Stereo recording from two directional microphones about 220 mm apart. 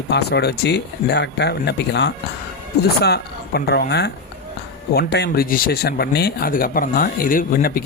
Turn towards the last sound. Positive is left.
turn(degrees=40)  # may be behind; listen again after turning